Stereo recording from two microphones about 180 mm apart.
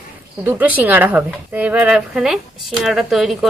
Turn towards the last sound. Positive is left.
turn(degrees=0)  # may be behind; listen again after turning